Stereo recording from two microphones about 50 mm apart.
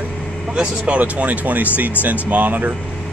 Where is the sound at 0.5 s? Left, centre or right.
Right.